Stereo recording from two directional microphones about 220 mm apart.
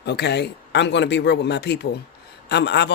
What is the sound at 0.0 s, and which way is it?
Speech, 50° left (ahead or behind).